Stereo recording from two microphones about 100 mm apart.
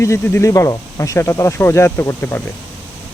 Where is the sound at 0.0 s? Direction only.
25° left (ahead or behind).